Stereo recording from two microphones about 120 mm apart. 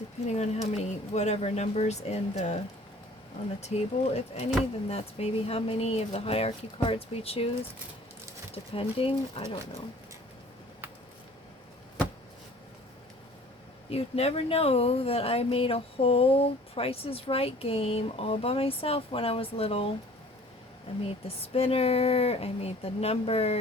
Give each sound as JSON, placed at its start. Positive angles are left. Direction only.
{"t": 0.3, "sound": "speech", "side_deg": 65}
{"t": 3.6, "sound": "speech", "side_deg": 60}
{"t": 8.5, "sound": "speech", "side_deg": 50}
{"t": 13.9, "sound": "speech", "side_deg": 55}
{"t": 21.2, "sound": "speech", "side_deg": 55}